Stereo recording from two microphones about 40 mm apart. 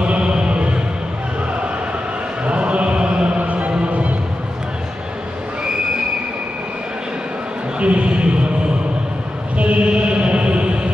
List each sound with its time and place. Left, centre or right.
0.0 s music: right
2.4 s chant: right
3.4 s music: right
7.8 s a sound: right
9.6 s chant: right